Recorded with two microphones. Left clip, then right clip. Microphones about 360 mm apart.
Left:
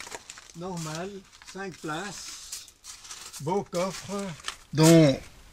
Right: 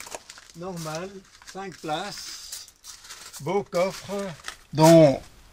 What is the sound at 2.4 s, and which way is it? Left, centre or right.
Crumpling, centre.